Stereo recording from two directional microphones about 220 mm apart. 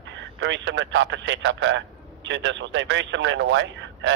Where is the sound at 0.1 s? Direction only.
55° right (ahead or behind).